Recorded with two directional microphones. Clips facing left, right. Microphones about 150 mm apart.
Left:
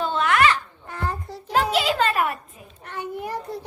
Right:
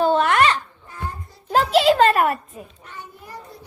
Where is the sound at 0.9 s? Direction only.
75° left (ahead or behind).